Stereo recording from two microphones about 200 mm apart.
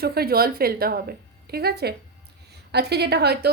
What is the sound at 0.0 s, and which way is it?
A woman's voice, 50° right (ahead or behind).